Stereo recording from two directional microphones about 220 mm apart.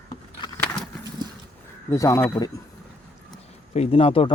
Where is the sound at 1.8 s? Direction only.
15° left (ahead or behind).